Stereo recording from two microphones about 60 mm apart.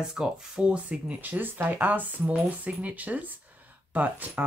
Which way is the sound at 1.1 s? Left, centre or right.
Right.